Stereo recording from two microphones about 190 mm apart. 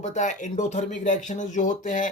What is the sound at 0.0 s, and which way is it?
Speech, 40° left (ahead or behind).